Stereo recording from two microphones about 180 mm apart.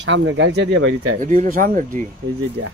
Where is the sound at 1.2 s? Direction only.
45° right (ahead or behind).